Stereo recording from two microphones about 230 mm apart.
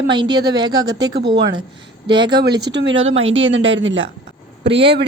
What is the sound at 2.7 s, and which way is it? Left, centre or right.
A woman's voice, right.